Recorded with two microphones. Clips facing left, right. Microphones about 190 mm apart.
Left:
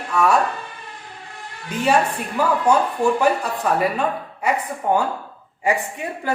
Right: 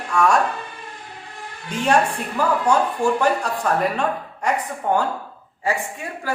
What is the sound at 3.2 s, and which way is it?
A woman's voice, 5° left (ahead or behind).